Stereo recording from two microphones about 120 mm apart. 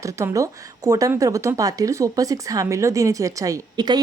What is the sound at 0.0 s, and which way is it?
A woman's voice, 25° right (ahead or behind).